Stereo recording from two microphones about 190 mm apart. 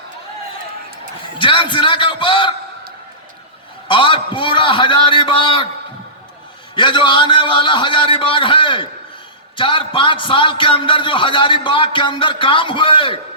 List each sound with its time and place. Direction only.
1.4 s a man's voice: 25° left (ahead or behind)
3.8 s a man's voice: 25° left (ahead or behind)
6.7 s a man's voice: 25° left (ahead or behind)